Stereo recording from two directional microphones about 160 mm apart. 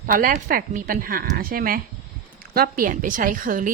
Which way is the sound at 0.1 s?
60° right (ahead or behind).